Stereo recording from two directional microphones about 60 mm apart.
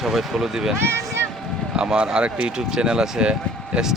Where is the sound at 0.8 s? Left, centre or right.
Right.